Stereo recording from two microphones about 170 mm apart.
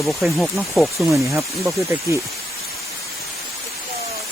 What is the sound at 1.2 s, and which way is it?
Speech, 15° right (ahead or behind).